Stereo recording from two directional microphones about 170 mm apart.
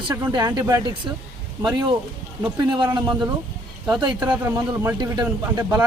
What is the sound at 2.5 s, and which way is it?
Speech, 20° right (ahead or behind).